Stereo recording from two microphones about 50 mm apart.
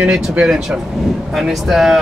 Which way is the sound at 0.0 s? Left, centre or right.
Right.